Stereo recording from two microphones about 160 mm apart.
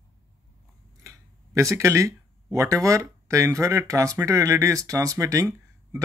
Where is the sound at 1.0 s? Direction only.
20° right (ahead or behind).